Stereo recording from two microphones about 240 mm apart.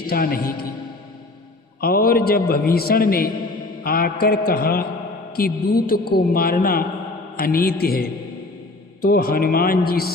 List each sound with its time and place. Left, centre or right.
0.1 s a man's voice: left
1.8 s a man's voice: left